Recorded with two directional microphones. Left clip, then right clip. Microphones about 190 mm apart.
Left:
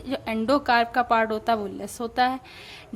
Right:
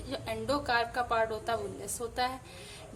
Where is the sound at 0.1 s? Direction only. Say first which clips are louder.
Left 9 dB; 35° left (ahead or behind).